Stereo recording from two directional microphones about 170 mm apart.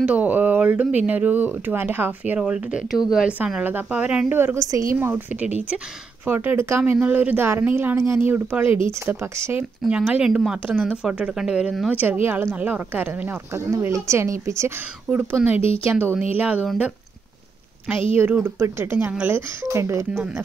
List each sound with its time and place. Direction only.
0.0 s speech: 10° right (ahead or behind)
15.5 s speech: 35° left (ahead or behind)
15.8 s speech: 15° right (ahead or behind)
18.1 s speech: 15° right (ahead or behind)